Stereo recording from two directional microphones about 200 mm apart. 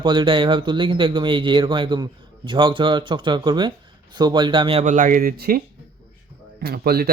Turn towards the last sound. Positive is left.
turn(degrees=-50)  # may be behind; listen again after turning